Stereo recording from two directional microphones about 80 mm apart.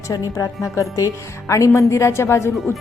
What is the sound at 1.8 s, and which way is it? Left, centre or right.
Speech, left.